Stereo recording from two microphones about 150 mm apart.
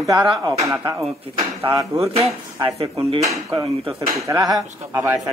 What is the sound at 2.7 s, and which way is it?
Speech, 35° right (ahead or behind).